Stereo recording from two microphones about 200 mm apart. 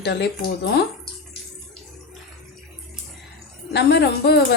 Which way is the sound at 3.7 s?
60° left (ahead or behind).